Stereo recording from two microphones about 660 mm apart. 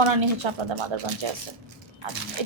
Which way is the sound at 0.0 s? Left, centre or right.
Right.